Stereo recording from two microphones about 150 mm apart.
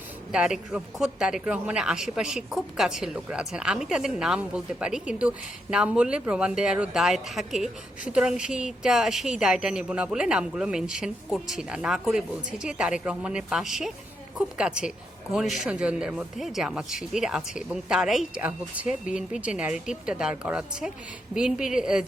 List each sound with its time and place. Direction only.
0.3 s speech: 5° right (ahead or behind)